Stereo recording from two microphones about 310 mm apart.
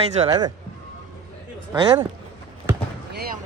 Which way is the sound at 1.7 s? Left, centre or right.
Centre.